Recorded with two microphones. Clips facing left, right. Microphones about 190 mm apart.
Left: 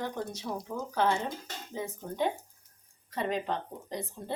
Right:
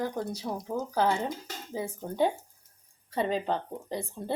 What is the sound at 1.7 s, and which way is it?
Speech, 35° right (ahead or behind).